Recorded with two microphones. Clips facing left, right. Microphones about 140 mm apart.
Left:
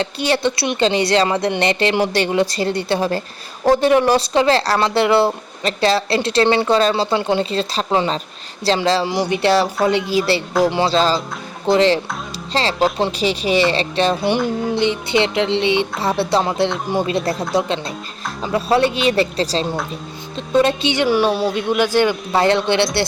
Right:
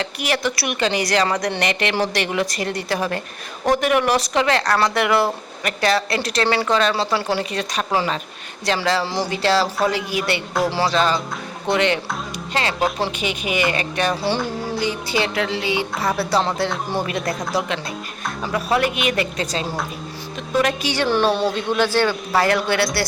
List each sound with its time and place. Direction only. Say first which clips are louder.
0.0 s speech: left 4 dB; 30° left (ahead or behind)
13.1 s speech: left 6 dB; 35° left (ahead or behind)
18.4 s speech: left 4 dB; 30° left (ahead or behind)
21.1 s speech: even; 5° left (ahead or behind); by 22.9 s 25° left (ahead or behind)